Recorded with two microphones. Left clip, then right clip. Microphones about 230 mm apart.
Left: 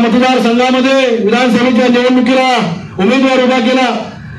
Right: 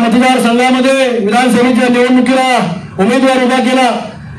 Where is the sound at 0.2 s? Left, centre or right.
Right.